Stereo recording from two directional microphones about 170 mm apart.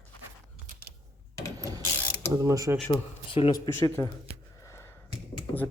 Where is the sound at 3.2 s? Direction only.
30° left (ahead or behind).